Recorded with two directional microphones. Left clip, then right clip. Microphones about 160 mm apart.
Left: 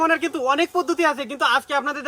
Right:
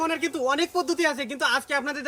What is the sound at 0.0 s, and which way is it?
A man's voice, 5° left (ahead or behind).